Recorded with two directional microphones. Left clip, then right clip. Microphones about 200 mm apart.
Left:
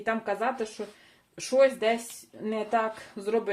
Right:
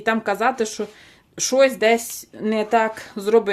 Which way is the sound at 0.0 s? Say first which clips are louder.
Right 9 dB; 35° right (ahead or behind).